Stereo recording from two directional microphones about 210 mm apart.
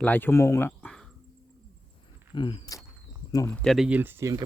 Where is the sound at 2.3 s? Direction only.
20° left (ahead or behind).